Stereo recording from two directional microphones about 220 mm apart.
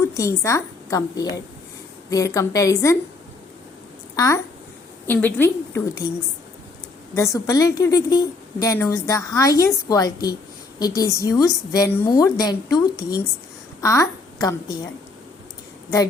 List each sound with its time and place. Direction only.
0.0 s a woman's voice: 15° left (ahead or behind)
5.0 s a woman's voice: 10° left (ahead or behind)
7.2 s a woman's voice: 15° left (ahead or behind)